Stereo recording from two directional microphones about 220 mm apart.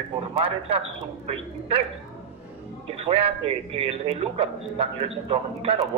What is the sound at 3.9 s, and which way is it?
A man's voice, 25° right (ahead or behind).